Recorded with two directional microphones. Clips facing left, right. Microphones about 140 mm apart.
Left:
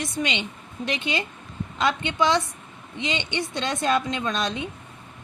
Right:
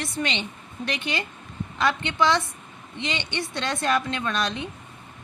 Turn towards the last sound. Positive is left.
turn(degrees=20)  # may be behind; listen again after turning